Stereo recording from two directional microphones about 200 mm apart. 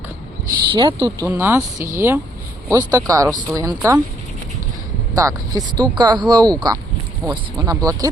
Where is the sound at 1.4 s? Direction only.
10° right (ahead or behind).